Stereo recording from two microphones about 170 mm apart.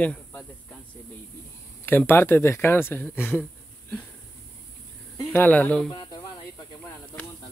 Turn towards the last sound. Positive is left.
turn(degrees=20)  # may be behind; listen again after turning